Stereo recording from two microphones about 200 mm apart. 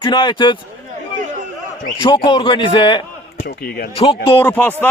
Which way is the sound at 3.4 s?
50° left (ahead or behind).